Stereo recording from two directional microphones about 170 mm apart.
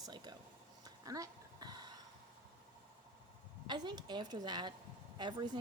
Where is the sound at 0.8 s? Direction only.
20° right (ahead or behind).